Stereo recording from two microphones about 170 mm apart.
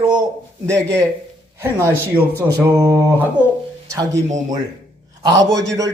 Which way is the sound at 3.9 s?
20° right (ahead or behind).